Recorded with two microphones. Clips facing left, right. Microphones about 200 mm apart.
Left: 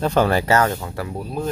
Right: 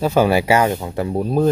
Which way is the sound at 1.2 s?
45° right (ahead or behind).